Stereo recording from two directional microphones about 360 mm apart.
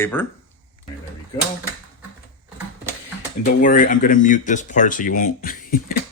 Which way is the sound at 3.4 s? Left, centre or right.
Left.